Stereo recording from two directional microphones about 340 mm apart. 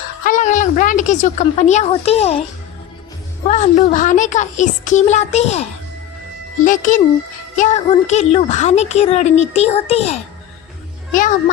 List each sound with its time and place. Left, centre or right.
0.3 s speech: left
3.4 s speech: left
6.7 s speech: left